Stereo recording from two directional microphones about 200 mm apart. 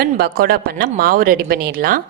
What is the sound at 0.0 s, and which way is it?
Speech, 50° right (ahead or behind).